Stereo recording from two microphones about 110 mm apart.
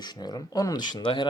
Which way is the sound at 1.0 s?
45° left (ahead or behind).